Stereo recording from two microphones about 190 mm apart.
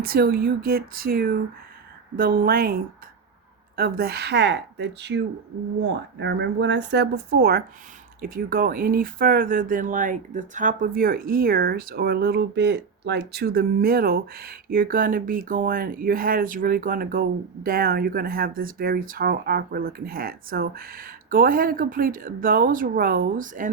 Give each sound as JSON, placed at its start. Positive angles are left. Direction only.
{"t": 0.0, "sound": "speech", "side_deg": -55}